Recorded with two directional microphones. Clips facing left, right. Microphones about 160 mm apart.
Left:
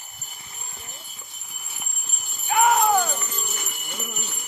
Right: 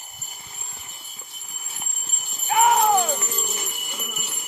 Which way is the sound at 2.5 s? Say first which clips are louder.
Right 1 dB; 10° right (ahead or behind).